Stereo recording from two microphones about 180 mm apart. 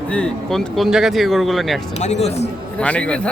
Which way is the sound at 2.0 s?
40° left (ahead or behind).